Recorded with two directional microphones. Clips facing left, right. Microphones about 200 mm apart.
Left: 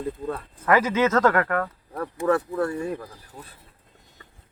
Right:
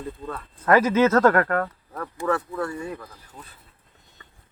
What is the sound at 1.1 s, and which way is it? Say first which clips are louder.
Speech: right 2 dB; 10° right (ahead or behind).